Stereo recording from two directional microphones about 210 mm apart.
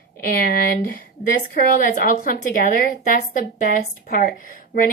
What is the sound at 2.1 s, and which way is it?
A woman's voice, 45° left (ahead or behind).